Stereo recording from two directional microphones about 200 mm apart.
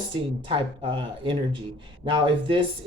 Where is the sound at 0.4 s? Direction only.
25° right (ahead or behind).